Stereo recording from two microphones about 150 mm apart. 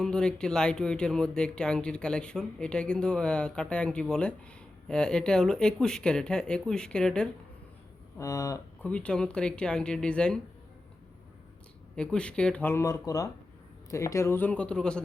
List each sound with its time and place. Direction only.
0.0 s speech: 5° left (ahead or behind)
8.2 s speech: 20° left (ahead or behind)
8.8 s speech: 5° left (ahead or behind)
11.9 s speech: 5° left (ahead or behind)